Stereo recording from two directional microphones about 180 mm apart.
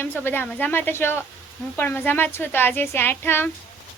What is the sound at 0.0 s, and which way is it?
Speech, 10° left (ahead or behind).